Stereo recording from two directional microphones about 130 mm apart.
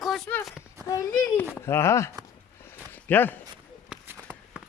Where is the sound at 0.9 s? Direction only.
25° left (ahead or behind).